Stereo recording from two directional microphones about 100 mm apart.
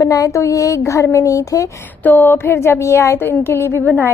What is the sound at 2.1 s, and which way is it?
Speech, 20° left (ahead or behind).